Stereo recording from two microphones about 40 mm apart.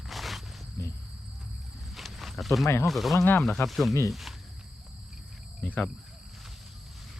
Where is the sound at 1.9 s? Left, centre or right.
Centre.